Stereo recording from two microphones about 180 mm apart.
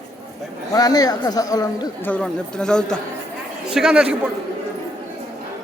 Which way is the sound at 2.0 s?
5° left (ahead or behind).